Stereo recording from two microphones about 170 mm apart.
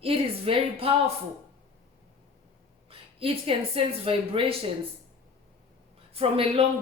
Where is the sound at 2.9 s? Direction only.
35° right (ahead or behind).